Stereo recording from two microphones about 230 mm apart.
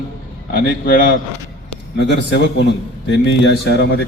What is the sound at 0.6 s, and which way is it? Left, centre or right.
A man's voice, left.